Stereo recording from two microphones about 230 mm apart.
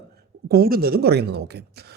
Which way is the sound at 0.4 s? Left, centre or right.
Right.